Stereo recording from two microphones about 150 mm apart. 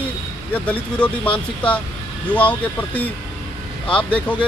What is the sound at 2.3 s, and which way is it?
Speech, 10° left (ahead or behind).